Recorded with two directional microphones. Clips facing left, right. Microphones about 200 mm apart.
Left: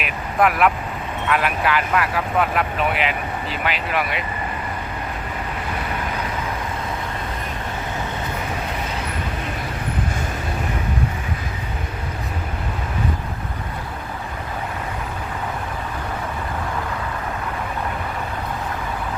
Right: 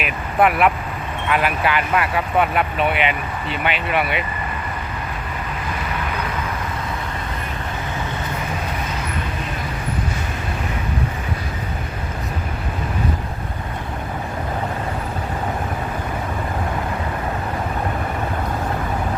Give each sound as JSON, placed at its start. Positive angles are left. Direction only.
{"t": 0.0, "sound": "vehicle", "side_deg": 0}
{"t": 1.3, "sound": "speech", "side_deg": 0}